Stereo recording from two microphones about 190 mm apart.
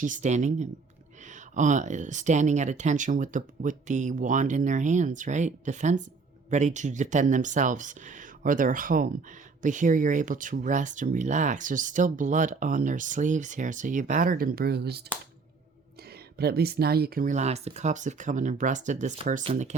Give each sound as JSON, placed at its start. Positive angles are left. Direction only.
{"t": 0.0, "sound": "speech", "side_deg": -40}
{"t": 16.4, "sound": "speech", "side_deg": -55}